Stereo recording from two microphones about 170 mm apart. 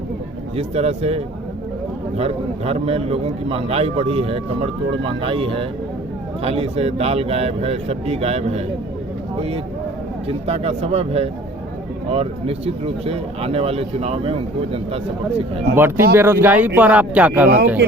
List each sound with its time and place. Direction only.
0.5 s a man's voice: 35° right (ahead or behind)
10.2 s a man's voice: 35° right (ahead or behind)
15.7 s speech: 15° right (ahead or behind)